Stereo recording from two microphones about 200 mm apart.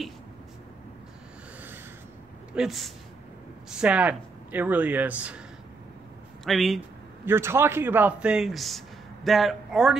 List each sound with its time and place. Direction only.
2.5 s speech: centre (ahead or behind)
6.4 s speech: centre (ahead or behind)
7.2 s speech: 10° right (ahead or behind)